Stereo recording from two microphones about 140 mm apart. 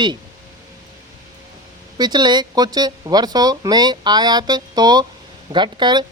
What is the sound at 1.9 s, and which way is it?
Speech, 30° right (ahead or behind).